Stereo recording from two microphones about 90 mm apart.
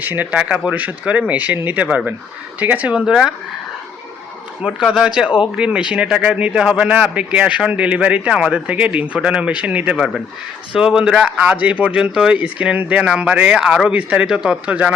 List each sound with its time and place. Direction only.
0.0 s a man's voice: 20° right (ahead or behind)
4.6 s a man's voice: 5° right (ahead or behind)